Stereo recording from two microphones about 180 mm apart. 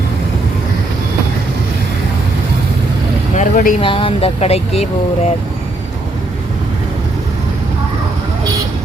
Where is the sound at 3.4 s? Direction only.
50° left (ahead or behind).